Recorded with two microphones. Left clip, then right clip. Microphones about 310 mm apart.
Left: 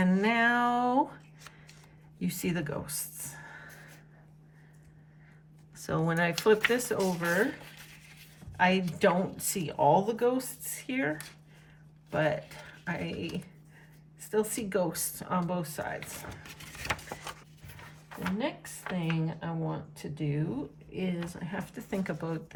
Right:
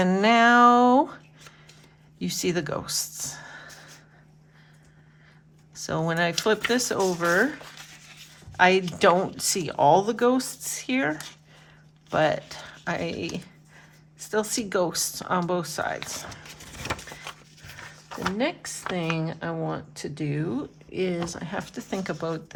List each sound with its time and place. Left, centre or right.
0.0 s a sound: centre
2.1 s speech: centre
5.7 s speech: centre
8.5 s speech: centre
18.2 s speech: centre